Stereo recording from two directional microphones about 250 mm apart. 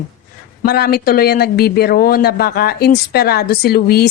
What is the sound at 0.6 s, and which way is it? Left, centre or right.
Speech, left.